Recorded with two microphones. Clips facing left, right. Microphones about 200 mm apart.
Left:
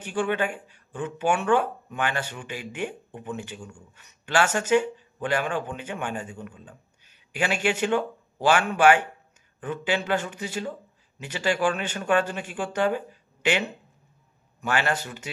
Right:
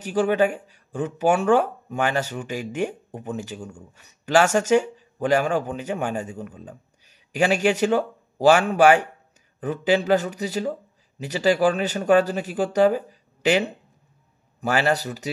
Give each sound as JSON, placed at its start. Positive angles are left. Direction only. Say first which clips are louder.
{"t": 0.0, "sound": "speech", "louder": "right 6 dB", "side_deg": -40}